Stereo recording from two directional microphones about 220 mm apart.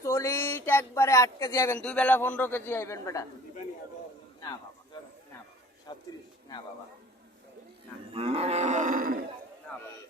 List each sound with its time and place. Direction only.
0.0 s speech: 10° left (ahead or behind)
5.9 s speech: 20° left (ahead or behind)
8.1 s cattle: 25° right (ahead or behind)
9.7 s music: 5° left (ahead or behind)